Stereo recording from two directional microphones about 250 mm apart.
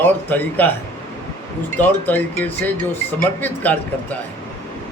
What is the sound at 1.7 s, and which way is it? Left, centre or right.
A man's voice, centre.